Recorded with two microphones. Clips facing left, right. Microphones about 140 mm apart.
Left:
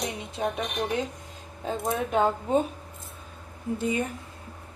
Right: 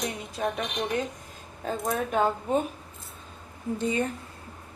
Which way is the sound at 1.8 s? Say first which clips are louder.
Left 1 dB; 25° left (ahead or behind).